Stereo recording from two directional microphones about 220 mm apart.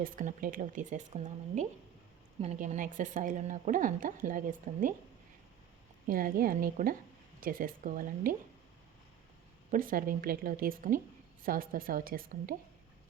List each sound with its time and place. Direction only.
0.0 s a woman's voice: 35° right (ahead or behind)
6.1 s a woman's voice: 40° right (ahead or behind)
9.7 s a woman's voice: 40° right (ahead or behind)